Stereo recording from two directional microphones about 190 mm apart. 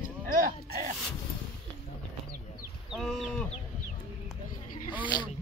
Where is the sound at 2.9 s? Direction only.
Centre (ahead or behind).